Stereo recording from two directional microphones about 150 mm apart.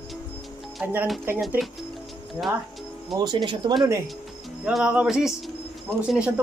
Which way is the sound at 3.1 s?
30° right (ahead or behind).